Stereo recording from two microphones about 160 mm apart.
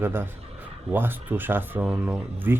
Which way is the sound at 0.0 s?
15° right (ahead or behind).